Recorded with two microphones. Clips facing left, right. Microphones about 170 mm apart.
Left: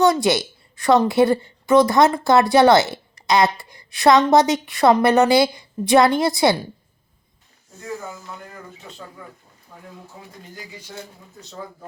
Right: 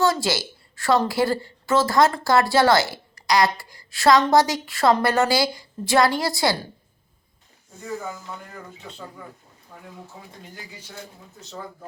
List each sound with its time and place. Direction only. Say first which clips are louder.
0.0 s a woman's voice: left 5 dB; 20° left (ahead or behind)